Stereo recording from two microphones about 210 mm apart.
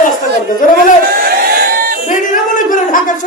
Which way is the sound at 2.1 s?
40° left (ahead or behind).